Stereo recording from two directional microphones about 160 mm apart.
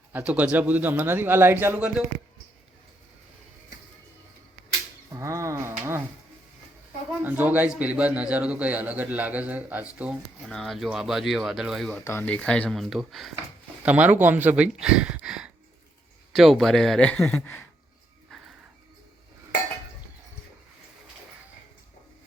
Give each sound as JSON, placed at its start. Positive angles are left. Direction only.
{"t": 0.1, "sound": "a man's voice", "side_deg": -10}
{"t": 5.1, "sound": "a sound", "side_deg": -20}
{"t": 7.2, "sound": "a man's voice", "side_deg": -10}
{"t": 12.0, "sound": "a man's voice", "side_deg": 15}